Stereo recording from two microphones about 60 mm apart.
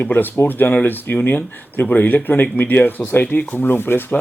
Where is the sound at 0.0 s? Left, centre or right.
Left.